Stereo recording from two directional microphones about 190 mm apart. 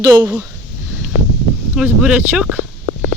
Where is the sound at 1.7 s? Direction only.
5° right (ahead or behind).